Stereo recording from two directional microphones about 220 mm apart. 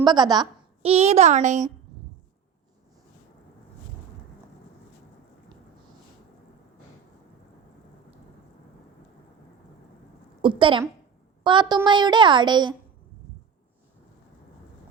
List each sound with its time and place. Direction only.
0.0 s a woman's voice: 20° right (ahead or behind)
10.4 s a woman's voice: 25° right (ahead or behind)